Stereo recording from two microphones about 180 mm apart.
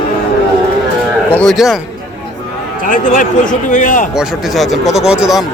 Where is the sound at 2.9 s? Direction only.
45° left (ahead or behind).